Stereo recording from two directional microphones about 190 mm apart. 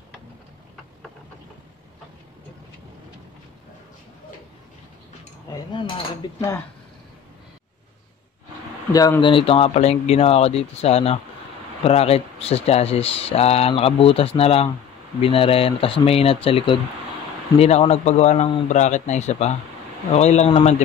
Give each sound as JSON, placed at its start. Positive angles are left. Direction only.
{"t": 5.5, "sound": "speech", "side_deg": 25}
{"t": 8.9, "sound": "speech", "side_deg": 20}